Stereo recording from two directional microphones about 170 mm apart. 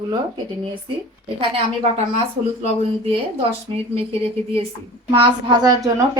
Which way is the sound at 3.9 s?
35° right (ahead or behind).